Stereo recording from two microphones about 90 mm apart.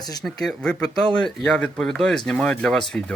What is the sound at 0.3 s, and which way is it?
Speech, 5° left (ahead or behind).